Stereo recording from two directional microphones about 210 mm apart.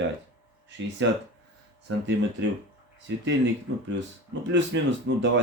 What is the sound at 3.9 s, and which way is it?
Speech, 60° right (ahead or behind).